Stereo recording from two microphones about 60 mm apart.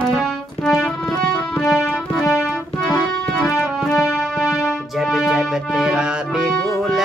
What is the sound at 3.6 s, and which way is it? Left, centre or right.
Music, centre.